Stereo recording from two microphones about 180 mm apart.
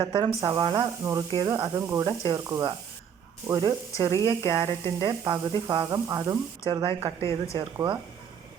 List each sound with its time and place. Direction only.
0.0 s speech: 25° right (ahead or behind)
6.7 s speech: 30° right (ahead or behind)
7.2 s speech: 15° left (ahead or behind)